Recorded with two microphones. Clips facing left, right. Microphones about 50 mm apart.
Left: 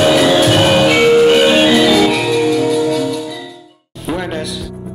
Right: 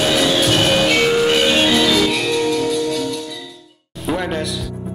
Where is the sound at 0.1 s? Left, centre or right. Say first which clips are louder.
Left 5 dB; centre.